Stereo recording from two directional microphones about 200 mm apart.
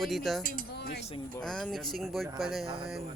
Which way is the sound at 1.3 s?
5° left (ahead or behind).